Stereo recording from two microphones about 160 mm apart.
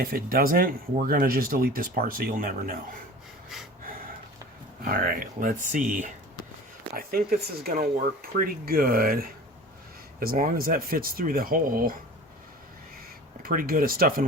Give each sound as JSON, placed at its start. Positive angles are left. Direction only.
{"t": 0.0, "sound": "speech", "side_deg": -70}
{"t": 4.8, "sound": "speech", "side_deg": -65}
{"t": 6.9, "sound": "speech", "side_deg": -70}
{"t": 13.4, "sound": "speech", "side_deg": -65}